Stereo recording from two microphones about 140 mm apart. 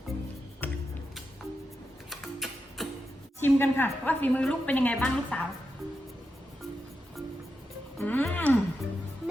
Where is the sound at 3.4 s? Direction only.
15° left (ahead or behind).